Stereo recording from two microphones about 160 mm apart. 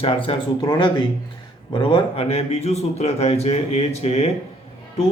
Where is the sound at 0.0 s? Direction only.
35° left (ahead or behind).